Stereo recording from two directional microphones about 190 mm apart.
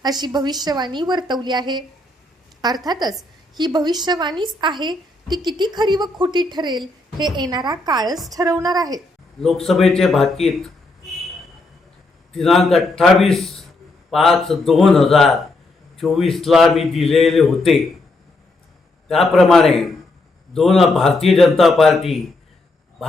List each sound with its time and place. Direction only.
0.0 s a woman's voice: 20° right (ahead or behind)
9.6 s speech: centre (ahead or behind)
12.3 s a man's voice: centre (ahead or behind)
19.0 s a man's voice: centre (ahead or behind)